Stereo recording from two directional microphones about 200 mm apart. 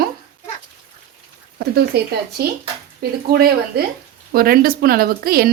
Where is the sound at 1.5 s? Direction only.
55° right (ahead or behind).